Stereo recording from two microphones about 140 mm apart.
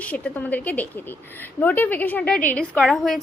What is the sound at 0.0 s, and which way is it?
A woman's voice, 10° left (ahead or behind).